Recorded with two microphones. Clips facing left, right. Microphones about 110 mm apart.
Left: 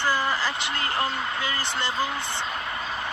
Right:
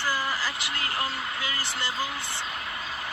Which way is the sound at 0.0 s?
25° left (ahead or behind).